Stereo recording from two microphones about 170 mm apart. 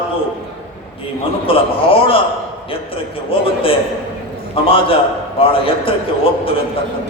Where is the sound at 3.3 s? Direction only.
30° left (ahead or behind).